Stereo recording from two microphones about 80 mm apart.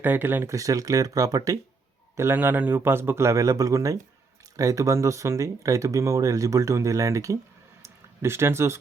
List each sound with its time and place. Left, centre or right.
0.0 s speech: right
0.5 s speech: right
2.1 s a man's voice: right
7.8 s a sound: right